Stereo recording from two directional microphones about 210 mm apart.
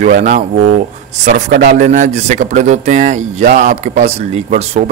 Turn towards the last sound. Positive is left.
turn(degrees=-30)  # may be behind; listen again after turning